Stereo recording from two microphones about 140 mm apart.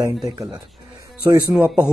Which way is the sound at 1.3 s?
10° right (ahead or behind).